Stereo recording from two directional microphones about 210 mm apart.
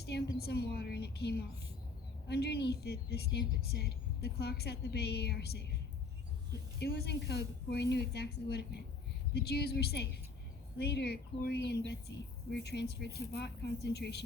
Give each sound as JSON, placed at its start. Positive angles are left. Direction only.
{"t": 0.0, "sound": "a woman's voice", "side_deg": 50}
{"t": 6.7, "sound": "a woman's voice", "side_deg": 50}